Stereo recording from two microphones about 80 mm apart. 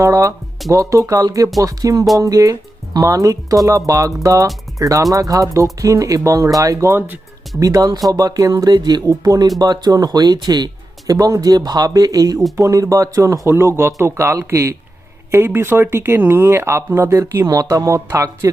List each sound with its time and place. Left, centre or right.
0.0 s speech: right
17.4 s speech: right